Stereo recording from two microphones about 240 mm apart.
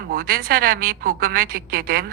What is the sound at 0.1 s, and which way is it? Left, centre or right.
A woman's voice, right.